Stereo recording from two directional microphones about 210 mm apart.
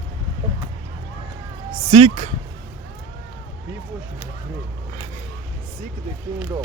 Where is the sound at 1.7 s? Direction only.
25° right (ahead or behind).